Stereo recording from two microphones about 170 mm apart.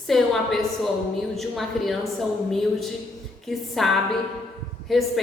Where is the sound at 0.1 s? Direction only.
Centre (ahead or behind).